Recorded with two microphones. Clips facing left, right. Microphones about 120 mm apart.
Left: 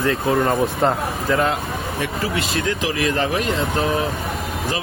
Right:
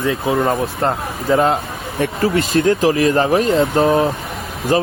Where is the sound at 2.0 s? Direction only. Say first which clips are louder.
Right 9 dB; 50° right (ahead or behind).